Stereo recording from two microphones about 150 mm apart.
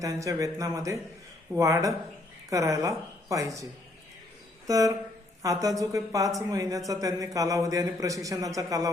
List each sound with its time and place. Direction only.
0.0 s speech: 20° right (ahead or behind)